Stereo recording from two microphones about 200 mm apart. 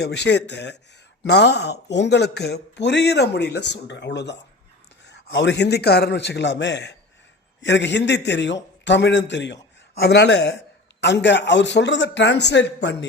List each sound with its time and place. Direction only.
0.0 s speech: 60° left (ahead or behind)